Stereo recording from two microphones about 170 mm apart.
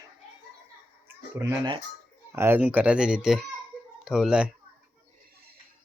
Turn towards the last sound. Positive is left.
turn(degrees=-5)  # may be behind; listen again after turning